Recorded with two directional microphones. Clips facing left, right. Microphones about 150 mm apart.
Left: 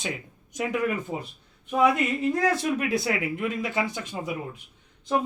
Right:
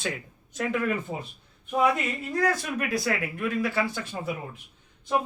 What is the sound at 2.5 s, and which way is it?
Speech, 20° left (ahead or behind).